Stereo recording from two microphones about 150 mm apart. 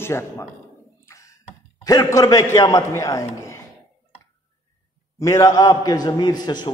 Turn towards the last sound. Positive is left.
turn(degrees=30)  # may be behind; listen again after turning